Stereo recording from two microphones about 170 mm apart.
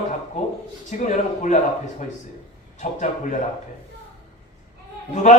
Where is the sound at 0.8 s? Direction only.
45° left (ahead or behind).